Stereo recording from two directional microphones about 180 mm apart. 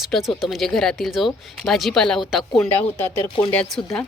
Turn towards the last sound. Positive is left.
turn(degrees=5)  # may be behind; listen again after turning